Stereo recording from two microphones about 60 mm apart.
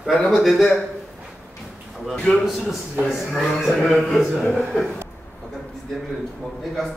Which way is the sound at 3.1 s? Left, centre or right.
Centre.